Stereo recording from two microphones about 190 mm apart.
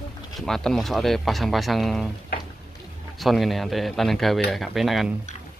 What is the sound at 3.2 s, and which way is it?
Speech, centre (ahead or behind).